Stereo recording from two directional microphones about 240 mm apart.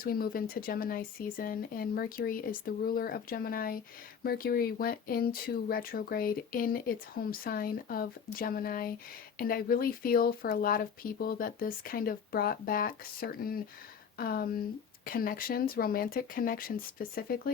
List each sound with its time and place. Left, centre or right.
0.0 s speech: left